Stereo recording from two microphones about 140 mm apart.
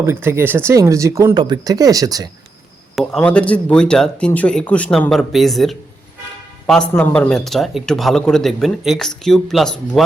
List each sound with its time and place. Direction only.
0.0 s speech: 15° right (ahead or behind)
2.9 s speech: 5° left (ahead or behind)